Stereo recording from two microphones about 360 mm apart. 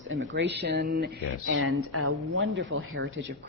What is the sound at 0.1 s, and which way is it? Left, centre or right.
Speech, right.